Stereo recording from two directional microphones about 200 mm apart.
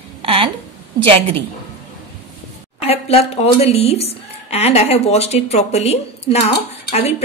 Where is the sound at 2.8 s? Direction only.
30° left (ahead or behind).